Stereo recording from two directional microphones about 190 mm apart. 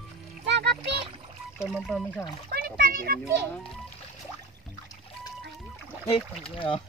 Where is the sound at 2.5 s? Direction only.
55° right (ahead or behind).